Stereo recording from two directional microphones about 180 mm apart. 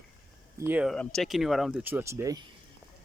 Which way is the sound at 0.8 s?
5° left (ahead or behind).